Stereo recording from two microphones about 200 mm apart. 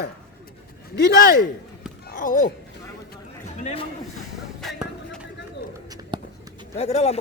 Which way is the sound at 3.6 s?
35° left (ahead or behind).